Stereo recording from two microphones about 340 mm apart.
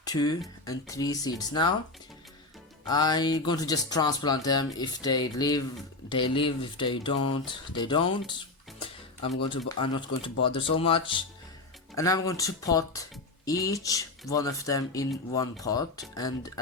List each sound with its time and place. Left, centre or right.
0.0 s speech: centre
2.8 s speech: centre
9.5 s speech: centre